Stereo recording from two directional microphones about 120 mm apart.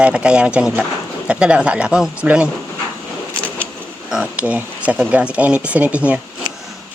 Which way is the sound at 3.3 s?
10° left (ahead or behind).